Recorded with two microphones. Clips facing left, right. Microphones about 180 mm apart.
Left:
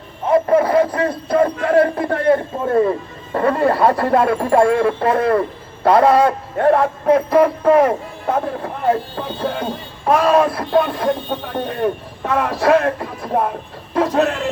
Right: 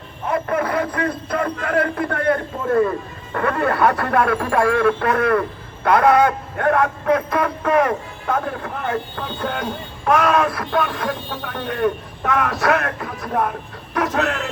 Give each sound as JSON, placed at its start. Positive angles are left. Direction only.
{"t": 0.3, "sound": "speech", "side_deg": 25}